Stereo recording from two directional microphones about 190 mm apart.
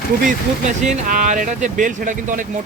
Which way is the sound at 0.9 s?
45° right (ahead or behind).